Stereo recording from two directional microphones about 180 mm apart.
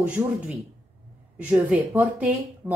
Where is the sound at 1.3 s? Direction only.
10° right (ahead or behind).